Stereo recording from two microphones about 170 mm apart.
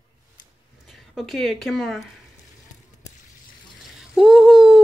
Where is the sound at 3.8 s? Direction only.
Centre (ahead or behind).